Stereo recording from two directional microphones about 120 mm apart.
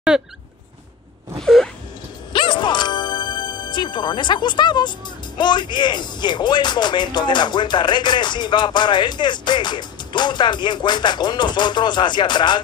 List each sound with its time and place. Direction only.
1.4 s a sound: 5° left (ahead or behind)
2.3 s music: 40° left (ahead or behind)
5.4 s speech: 40° left (ahead or behind)